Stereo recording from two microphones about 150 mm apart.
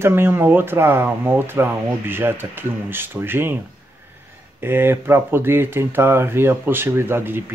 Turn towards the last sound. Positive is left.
turn(degrees=-15)  # may be behind; listen again after turning